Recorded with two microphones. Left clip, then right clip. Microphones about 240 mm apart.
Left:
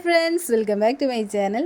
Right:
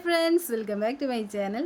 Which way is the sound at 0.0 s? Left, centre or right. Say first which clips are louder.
Left 4 dB; centre.